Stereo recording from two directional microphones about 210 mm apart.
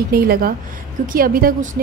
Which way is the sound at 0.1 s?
45° right (ahead or behind).